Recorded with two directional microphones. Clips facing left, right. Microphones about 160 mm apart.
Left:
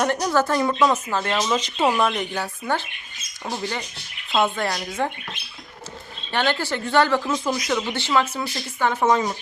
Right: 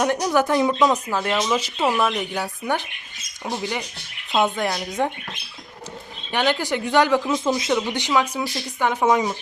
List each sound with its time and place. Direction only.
0.0 s speech: 10° right (ahead or behind)
3.4 s speech: centre (ahead or behind)
4.3 s speech: 15° right (ahead or behind)
6.3 s speech: 15° right (ahead or behind)